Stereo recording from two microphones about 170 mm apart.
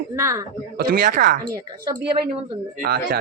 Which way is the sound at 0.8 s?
55° right (ahead or behind).